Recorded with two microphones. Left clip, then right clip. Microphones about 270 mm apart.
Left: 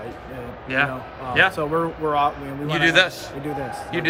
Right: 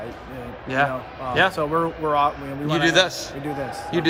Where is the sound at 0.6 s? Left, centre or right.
Centre.